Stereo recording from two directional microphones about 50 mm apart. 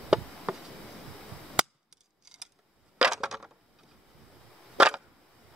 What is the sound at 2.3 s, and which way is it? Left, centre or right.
Scissors, centre.